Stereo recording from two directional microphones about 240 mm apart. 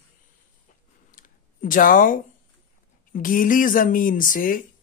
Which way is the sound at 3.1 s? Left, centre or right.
Left.